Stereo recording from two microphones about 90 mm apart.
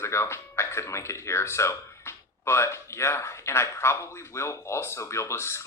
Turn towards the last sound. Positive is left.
turn(degrees=30)  # may be behind; listen again after turning